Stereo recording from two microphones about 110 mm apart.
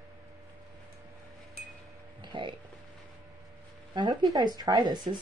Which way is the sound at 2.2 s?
45° right (ahead or behind).